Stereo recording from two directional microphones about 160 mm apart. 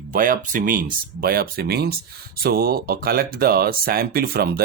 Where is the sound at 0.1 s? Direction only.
60° right (ahead or behind).